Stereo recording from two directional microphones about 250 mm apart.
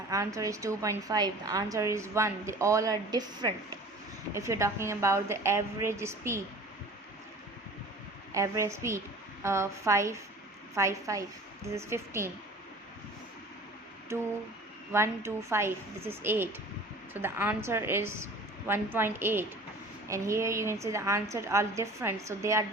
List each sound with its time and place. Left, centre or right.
0.1 s a woman's voice: centre
8.3 s a woman's voice: centre
14.9 s a woman's voice: centre